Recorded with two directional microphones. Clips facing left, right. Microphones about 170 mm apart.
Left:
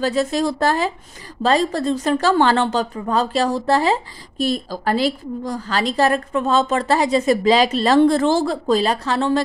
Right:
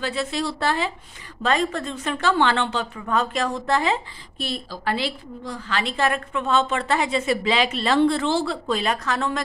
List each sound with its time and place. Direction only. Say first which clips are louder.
0.0 s speech: left 7 dB; 40° left (ahead or behind)